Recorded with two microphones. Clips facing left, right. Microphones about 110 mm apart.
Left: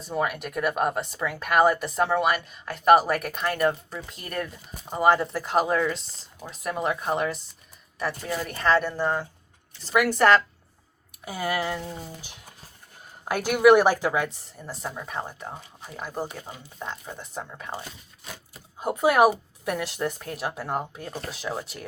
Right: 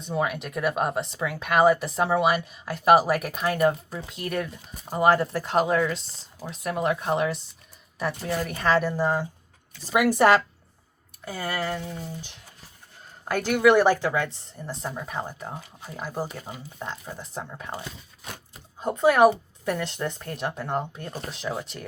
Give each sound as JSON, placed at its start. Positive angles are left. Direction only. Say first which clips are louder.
{"t": 0.0, "sound": "speech", "louder": "even", "side_deg": 0}
{"t": 11.3, "sound": "a woman's voice", "louder": "left 1 dB", "side_deg": 10}
{"t": 18.8, "sound": "speech", "louder": "right 1 dB", "side_deg": 10}